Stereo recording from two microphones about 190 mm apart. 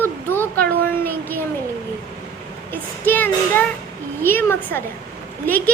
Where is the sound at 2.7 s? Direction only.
10° left (ahead or behind).